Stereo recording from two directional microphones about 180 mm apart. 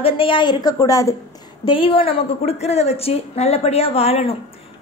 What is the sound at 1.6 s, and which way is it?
A woman's voice, 30° left (ahead or behind).